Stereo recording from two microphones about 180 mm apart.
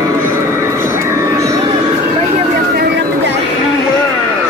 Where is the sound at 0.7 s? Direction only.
15° right (ahead or behind).